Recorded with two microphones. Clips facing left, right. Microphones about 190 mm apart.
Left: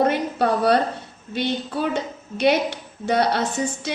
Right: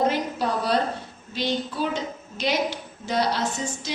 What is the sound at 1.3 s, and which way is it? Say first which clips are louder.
A woman's voice: left 2 dB; 60° left (ahead or behind).